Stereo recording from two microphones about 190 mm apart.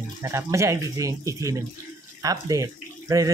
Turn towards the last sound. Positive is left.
turn(degrees=-15)  # may be behind; listen again after turning